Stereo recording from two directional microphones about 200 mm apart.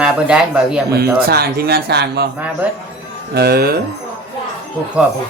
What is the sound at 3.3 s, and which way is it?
Speech, 55° right (ahead or behind).